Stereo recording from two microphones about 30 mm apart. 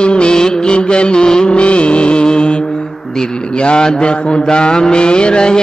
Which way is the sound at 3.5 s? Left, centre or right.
Left.